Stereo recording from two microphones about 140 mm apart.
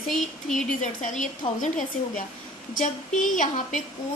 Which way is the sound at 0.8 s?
65° left (ahead or behind).